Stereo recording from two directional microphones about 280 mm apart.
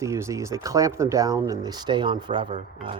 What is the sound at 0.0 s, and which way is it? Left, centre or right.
Speech, centre.